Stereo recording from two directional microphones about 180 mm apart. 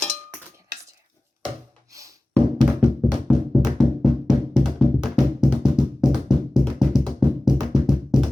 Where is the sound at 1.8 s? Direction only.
20° right (ahead or behind).